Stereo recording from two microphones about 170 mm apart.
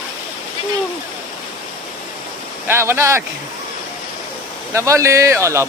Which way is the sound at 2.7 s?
15° right (ahead or behind).